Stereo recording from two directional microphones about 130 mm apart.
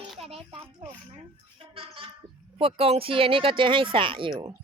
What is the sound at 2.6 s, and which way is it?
Speech, 45° right (ahead or behind).